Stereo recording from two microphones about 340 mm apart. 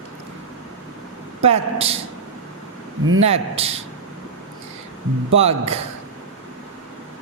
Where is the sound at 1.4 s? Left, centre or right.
Centre.